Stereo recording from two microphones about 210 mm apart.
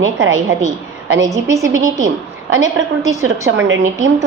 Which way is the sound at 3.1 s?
15° right (ahead or behind).